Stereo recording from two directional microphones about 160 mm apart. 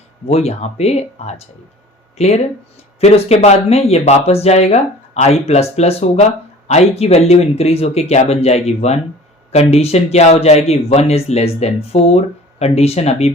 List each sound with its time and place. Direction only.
0.3 s speech: 40° left (ahead or behind)